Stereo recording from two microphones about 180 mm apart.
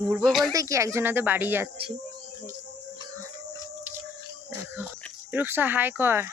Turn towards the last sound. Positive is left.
turn(degrees=-15)  # may be behind; listen again after turning